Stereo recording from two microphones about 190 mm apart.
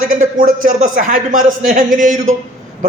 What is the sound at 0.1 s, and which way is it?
A man's voice, 45° right (ahead or behind).